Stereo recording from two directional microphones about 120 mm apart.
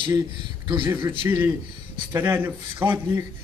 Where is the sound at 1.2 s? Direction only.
25° right (ahead or behind).